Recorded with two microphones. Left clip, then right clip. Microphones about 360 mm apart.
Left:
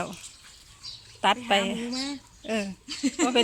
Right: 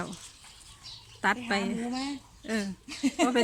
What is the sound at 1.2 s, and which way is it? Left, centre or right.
Speech, centre.